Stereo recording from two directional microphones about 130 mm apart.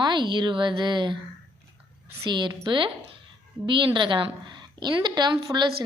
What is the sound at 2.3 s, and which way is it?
A woman's voice, 35° right (ahead or behind).